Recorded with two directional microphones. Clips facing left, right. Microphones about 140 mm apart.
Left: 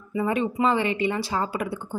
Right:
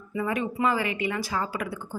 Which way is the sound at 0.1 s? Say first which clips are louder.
Left 4 dB; 30° left (ahead or behind).